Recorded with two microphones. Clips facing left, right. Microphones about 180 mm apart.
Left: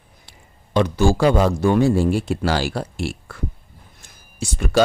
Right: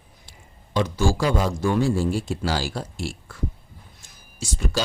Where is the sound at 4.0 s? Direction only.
60° left (ahead or behind).